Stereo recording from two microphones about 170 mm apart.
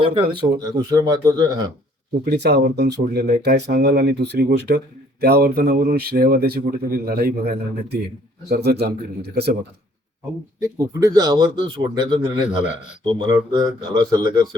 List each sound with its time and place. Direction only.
0.0 s a man's voice: 30° right (ahead or behind)
2.2 s speech: 75° right (ahead or behind)
10.6 s a man's voice: 20° right (ahead or behind)
12.5 s speech: 5° right (ahead or behind)
13.1 s a man's voice: 30° right (ahead or behind)